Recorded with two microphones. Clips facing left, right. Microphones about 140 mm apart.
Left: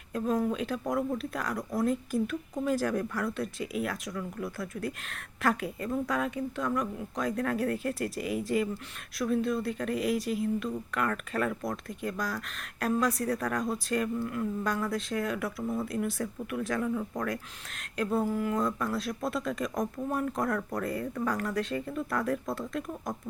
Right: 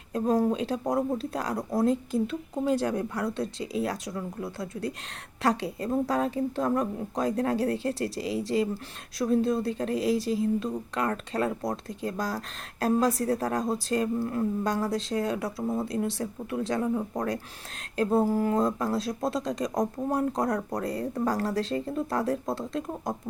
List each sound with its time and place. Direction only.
0.1 s speech: 35° right (ahead or behind)